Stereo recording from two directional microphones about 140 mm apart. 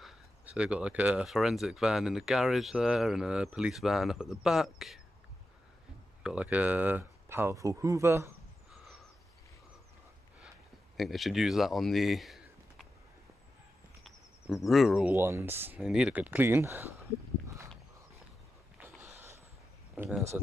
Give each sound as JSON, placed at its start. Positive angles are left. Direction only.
{"t": 0.0, "sound": "speech", "side_deg": -10}
{"t": 6.2, "sound": "speech", "side_deg": -10}
{"t": 11.0, "sound": "speech", "side_deg": 0}
{"t": 14.7, "sound": "speech", "side_deg": 0}
{"t": 15.1, "sound": "speech", "side_deg": -15}
{"t": 15.8, "sound": "speech", "side_deg": -5}